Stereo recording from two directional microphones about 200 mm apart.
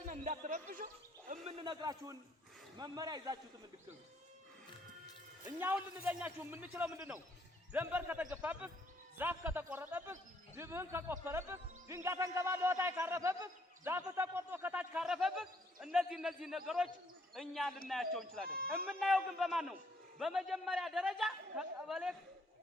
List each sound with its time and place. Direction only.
0.0 s speech: 40° right (ahead or behind)
1.3 s speech: 30° right (ahead or behind)
5.5 s a man's voice: 10° right (ahead or behind)
18.4 s speech: 50° right (ahead or behind)
18.9 s a man's voice: centre (ahead or behind)